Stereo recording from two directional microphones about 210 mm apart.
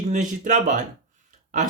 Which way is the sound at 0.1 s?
35° right (ahead or behind).